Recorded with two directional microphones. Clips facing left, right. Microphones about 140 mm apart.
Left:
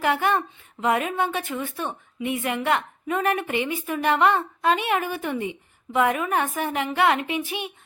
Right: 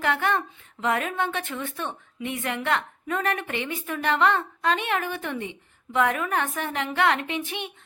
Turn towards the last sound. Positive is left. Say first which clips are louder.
# left 3 dB
turn(degrees=5)  # may be behind; listen again after turning